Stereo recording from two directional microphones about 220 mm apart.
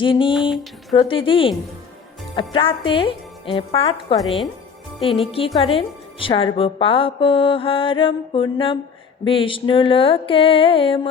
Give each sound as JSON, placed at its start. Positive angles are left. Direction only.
{"t": 0.0, "sound": "a woman's voice", "side_deg": 20}